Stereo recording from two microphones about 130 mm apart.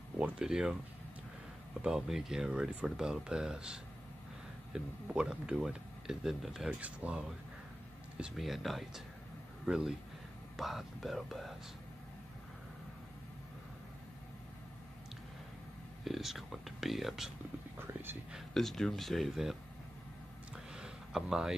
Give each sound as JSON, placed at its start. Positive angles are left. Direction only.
{"t": 0.2, "sound": "speech", "side_deg": -5}
{"t": 1.8, "sound": "speech", "side_deg": -5}
{"t": 16.0, "sound": "speech", "side_deg": 0}
{"t": 18.3, "sound": "speech", "side_deg": 0}
{"t": 20.7, "sound": "a sound", "side_deg": -5}